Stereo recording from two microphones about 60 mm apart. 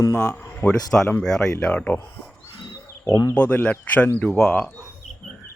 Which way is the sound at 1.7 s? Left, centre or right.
Left.